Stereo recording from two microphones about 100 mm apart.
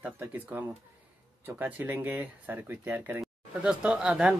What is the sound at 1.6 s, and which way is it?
A woman's voice, 20° right (ahead or behind).